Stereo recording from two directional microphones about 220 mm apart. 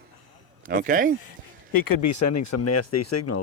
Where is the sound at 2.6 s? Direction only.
90° left.